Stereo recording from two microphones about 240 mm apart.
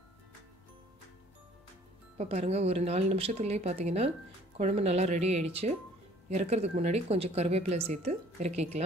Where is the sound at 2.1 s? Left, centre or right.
Right.